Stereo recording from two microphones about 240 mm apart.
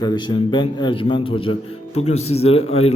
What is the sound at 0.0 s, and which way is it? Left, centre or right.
A man's voice, centre.